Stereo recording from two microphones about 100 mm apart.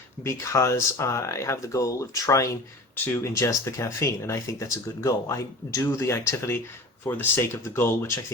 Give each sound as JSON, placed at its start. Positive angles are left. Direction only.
{"t": 0.2, "sound": "speech", "side_deg": 25}
{"t": 2.9, "sound": "speech", "side_deg": 20}
{"t": 3.3, "sound": "speech", "side_deg": 30}